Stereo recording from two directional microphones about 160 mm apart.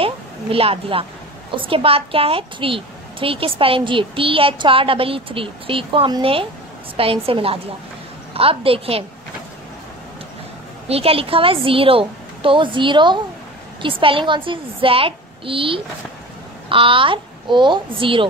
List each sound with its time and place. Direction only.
0.0 s a woman's voice: 35° right (ahead or behind)
10.9 s a woman's voice: 35° right (ahead or behind)